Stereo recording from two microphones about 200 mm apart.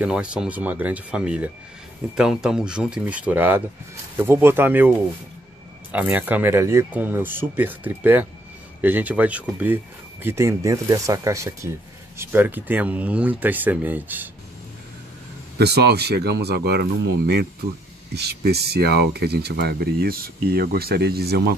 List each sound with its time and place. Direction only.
0.0 s speech: 5° right (ahead or behind)
15.5 s speech: 55° right (ahead or behind)